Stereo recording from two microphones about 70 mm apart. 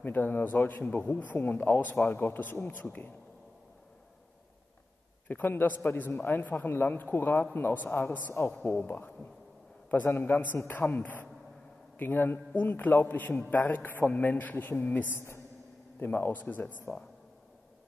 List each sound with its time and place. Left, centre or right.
0.0 s a man's voice: left
5.3 s a man's voice: left
15.1 s a woman's voice: left
16.0 s a man's voice: left